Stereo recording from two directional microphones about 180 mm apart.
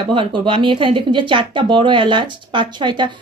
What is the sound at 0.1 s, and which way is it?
Speech, 30° right (ahead or behind).